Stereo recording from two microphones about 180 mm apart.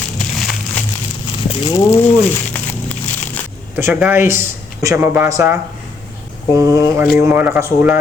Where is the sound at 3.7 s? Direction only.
10° right (ahead or behind).